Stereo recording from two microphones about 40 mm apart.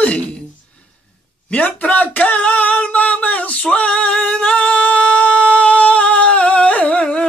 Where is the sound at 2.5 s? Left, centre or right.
Left.